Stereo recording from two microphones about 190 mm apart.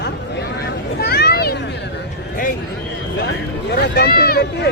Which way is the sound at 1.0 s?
55° left (ahead or behind).